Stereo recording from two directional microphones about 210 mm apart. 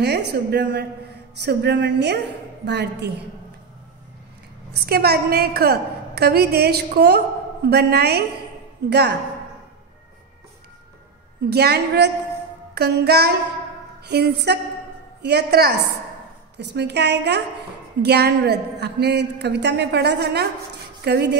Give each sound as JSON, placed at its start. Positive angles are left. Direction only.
{"t": 0.0, "sound": "a woman's voice", "side_deg": -50}
{"t": 4.7, "sound": "a woman's voice", "side_deg": -50}
{"t": 11.5, "sound": "a woman's voice", "side_deg": -50}